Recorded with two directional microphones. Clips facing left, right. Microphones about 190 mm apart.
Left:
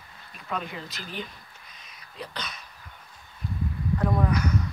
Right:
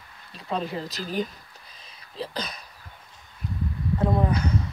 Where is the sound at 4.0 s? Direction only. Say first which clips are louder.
Right 2 dB; 25° right (ahead or behind).